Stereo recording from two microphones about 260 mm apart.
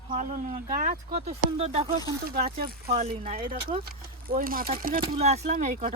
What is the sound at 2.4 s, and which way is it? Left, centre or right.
Speech, right.